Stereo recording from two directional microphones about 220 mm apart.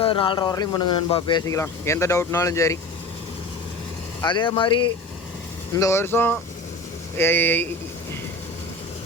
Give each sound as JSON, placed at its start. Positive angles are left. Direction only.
{"t": 0.0, "sound": "speech", "side_deg": 25}
{"t": 4.2, "sound": "speech", "side_deg": 20}
{"t": 5.7, "sound": "speech", "side_deg": 15}